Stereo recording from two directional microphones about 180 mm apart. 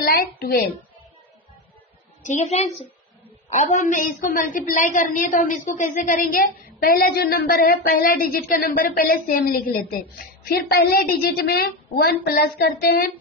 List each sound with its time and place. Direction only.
0.1 s speech: 60° left (ahead or behind)
2.2 s a woman's voice: 40° left (ahead or behind); by 13.1 s 55° left (ahead or behind)